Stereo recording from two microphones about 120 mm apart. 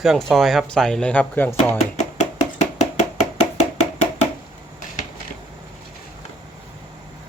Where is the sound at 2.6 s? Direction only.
75° left (ahead or behind).